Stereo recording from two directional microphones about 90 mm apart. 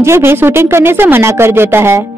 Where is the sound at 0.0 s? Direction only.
30° right (ahead or behind).